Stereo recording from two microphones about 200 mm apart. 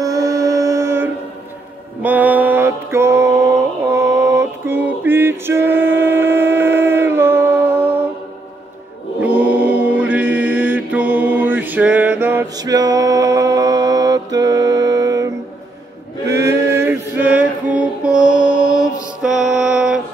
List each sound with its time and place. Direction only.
0.0 s mantra: 15° right (ahead or behind)
9.2 s mantra: 10° right (ahead or behind)
16.7 s mantra: 10° right (ahead or behind)
18.7 s mantra: 15° left (ahead or behind)
19.2 s mantra: centre (ahead or behind)